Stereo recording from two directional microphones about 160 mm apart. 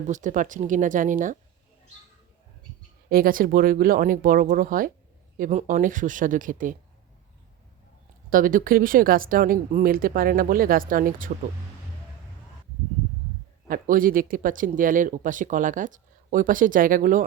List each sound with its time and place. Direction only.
0.1 s speech: 50° right (ahead or behind)
3.1 s speech: 65° right (ahead or behind)
5.4 s speech: 50° right (ahead or behind)
8.3 s speech: 60° right (ahead or behind)
13.7 s speech: 60° right (ahead or behind)